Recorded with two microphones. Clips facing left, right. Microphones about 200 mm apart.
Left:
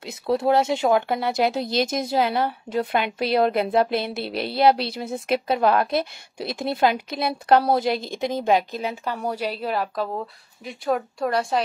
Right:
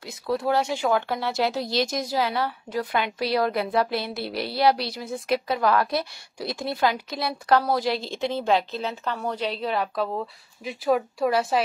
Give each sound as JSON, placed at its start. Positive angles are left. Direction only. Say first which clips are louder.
{"t": 0.0, "sound": "speech", "louder": "left 4 dB", "side_deg": 25}